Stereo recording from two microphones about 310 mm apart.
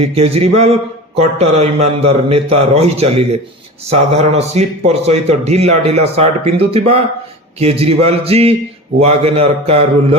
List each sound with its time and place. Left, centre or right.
0.0 s speech: centre